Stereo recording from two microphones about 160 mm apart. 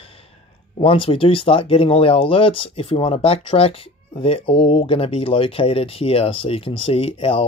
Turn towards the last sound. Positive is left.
turn(degrees=35)  # may be behind; listen again after turning